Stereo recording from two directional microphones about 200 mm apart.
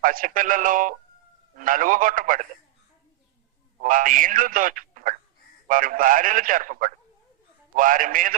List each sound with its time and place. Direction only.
0.0 s a man's voice: 45° right (ahead or behind)
3.8 s a man's voice: 40° right (ahead or behind)